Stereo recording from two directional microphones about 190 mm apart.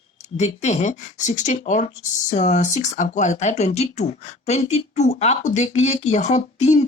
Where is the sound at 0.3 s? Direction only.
35° left (ahead or behind).